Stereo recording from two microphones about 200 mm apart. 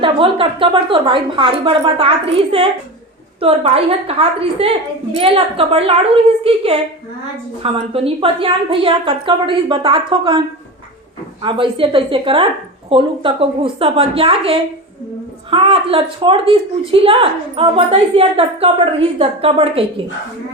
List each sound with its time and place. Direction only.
0.0 s a woman's voice: 25° right (ahead or behind)
11.4 s a woman's voice: 25° right (ahead or behind)